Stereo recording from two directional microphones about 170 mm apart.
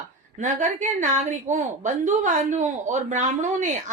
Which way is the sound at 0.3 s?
45° right (ahead or behind).